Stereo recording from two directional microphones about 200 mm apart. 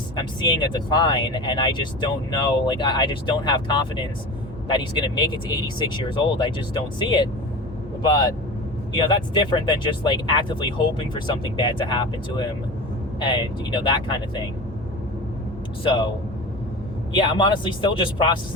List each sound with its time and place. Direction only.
0.2 s speech: 20° left (ahead or behind)
15.8 s speech: 25° left (ahead or behind)
17.2 s speech: 25° left (ahead or behind)